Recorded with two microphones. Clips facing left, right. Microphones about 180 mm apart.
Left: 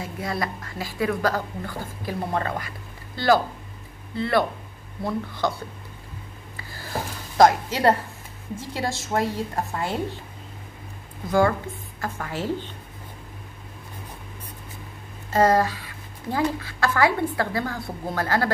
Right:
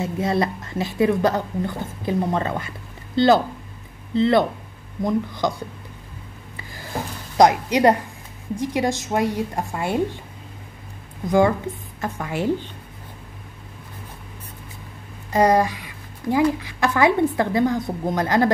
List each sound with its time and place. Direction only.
0.0 s a woman's voice: 25° right (ahead or behind)
6.5 s rub: 15° right (ahead or behind)
7.3 s a woman's voice: 15° right (ahead or behind)
11.2 s a woman's voice: 20° right (ahead or behind)
15.3 s a woman's voice: 15° right (ahead or behind)